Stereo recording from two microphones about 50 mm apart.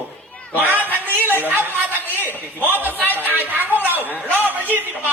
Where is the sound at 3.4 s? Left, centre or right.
Right.